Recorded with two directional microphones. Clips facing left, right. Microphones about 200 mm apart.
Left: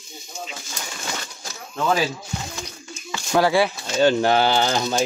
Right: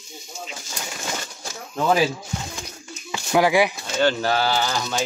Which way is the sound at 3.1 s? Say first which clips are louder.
Even; 15° right (ahead or behind).